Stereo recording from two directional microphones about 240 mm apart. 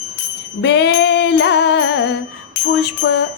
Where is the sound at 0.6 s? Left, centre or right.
Left.